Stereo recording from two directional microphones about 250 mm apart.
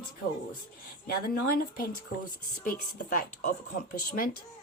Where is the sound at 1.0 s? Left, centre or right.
Left.